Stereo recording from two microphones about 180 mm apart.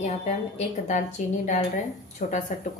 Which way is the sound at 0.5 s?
40° left (ahead or behind).